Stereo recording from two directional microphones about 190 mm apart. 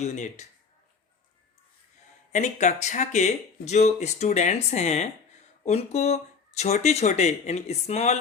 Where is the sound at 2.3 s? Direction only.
40° left (ahead or behind).